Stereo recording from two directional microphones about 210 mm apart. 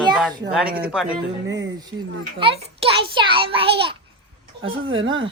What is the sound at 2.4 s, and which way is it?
A child's voice, 25° right (ahead or behind).